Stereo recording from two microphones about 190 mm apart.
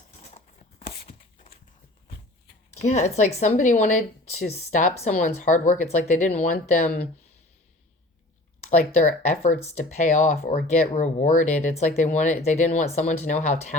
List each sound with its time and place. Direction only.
0.3 s a sound: 30° left (ahead or behind)
2.9 s speech: 35° left (ahead or behind)
8.8 s speech: 40° left (ahead or behind)
10.4 s speech: 50° left (ahead or behind)
10.9 s speech: 40° left (ahead or behind)